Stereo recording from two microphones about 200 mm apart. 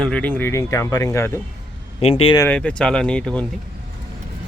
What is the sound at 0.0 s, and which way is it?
Speech, 5° left (ahead or behind).